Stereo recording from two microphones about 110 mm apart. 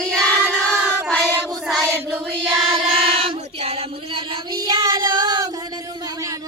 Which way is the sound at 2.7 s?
60° right (ahead or behind).